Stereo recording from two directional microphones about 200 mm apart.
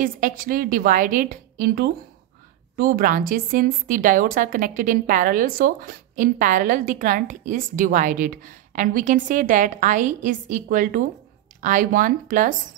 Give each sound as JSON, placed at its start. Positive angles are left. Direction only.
{"t": 0.0, "sound": "a woman's voice", "side_deg": -45}